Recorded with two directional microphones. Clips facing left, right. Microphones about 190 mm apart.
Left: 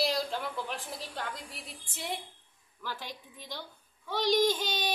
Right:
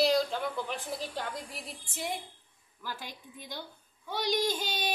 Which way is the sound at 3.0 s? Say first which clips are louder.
Left 1 dB; 50° right (ahead or behind).